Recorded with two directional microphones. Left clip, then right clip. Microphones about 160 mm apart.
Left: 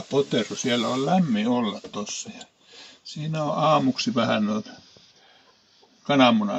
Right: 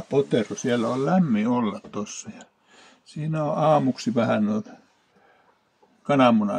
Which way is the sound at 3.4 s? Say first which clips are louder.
Right 1 dB; 30° right (ahead or behind).